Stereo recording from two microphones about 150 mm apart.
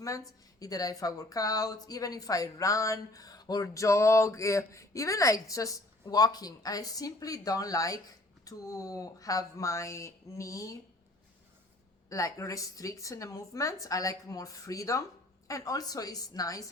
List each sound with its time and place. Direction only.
0.6 s speech: 25° left (ahead or behind)
12.0 s speech: 20° left (ahead or behind)